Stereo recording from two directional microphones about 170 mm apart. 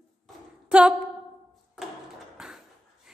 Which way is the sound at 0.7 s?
5° right (ahead or behind).